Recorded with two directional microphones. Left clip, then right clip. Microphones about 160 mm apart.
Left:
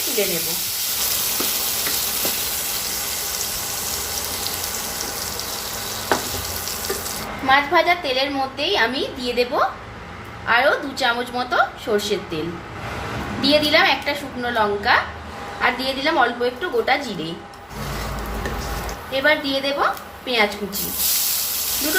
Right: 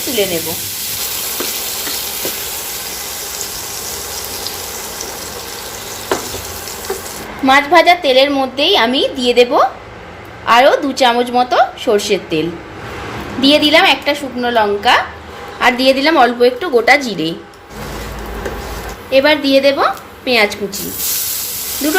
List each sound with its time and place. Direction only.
7.4 s a woman's voice: 45° right (ahead or behind)
13.4 s a woman's voice: 35° right (ahead or behind)
19.1 s a woman's voice: 45° right (ahead or behind)